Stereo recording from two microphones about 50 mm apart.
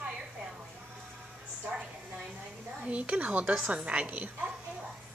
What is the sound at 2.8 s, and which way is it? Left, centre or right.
A woman's voice, right.